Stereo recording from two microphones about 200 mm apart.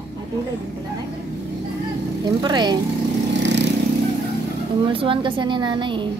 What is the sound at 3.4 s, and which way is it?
Vehicle, 65° right (ahead or behind).